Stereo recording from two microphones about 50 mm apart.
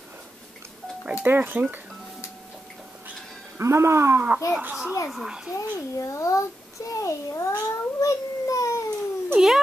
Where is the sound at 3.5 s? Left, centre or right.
Right.